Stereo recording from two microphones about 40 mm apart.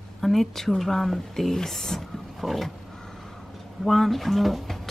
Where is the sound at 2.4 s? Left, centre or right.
Centre.